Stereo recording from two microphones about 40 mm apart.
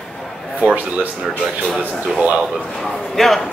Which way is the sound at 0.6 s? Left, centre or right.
Right.